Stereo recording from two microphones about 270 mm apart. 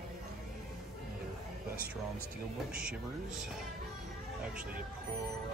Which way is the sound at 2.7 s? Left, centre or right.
Centre.